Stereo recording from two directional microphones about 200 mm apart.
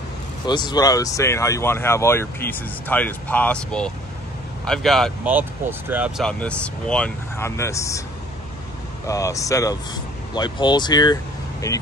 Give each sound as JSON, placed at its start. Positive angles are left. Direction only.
{"t": 0.5, "sound": "speech", "side_deg": 20}
{"t": 5.3, "sound": "speech", "side_deg": -10}
{"t": 9.0, "sound": "speech", "side_deg": 15}